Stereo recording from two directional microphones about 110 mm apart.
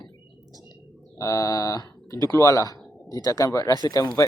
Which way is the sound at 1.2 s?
30° left (ahead or behind).